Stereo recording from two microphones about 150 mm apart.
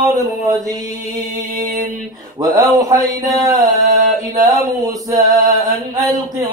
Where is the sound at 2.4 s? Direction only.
25° right (ahead or behind).